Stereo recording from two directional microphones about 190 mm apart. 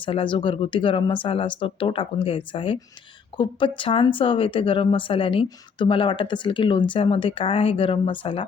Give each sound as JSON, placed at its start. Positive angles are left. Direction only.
{"t": 0.0, "sound": "speech", "side_deg": 25}